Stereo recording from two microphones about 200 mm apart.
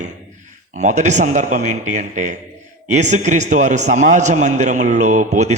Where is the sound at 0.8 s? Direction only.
35° right (ahead or behind).